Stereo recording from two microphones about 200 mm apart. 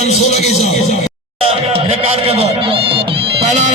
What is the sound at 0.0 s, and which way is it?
Speech, 35° left (ahead or behind).